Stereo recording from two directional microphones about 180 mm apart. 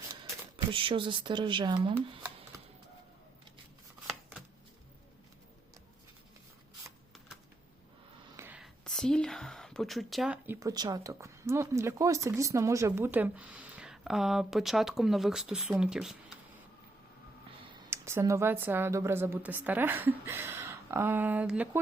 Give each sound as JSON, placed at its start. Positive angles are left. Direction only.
{"t": 0.5, "sound": "speech", "side_deg": -30}
{"t": 4.0, "sound": "shuffling cards", "side_deg": -5}
{"t": 8.4, "sound": "speech", "side_deg": -10}
{"t": 17.9, "sound": "a woman's voice", "side_deg": -15}